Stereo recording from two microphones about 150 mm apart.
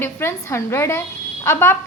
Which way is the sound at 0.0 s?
15° left (ahead or behind).